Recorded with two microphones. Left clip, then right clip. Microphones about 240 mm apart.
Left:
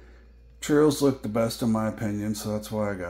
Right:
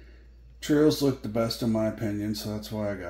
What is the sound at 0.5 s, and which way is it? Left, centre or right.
Speech, left.